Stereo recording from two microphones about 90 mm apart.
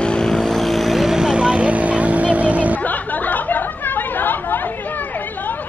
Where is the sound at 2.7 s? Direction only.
20° left (ahead or behind).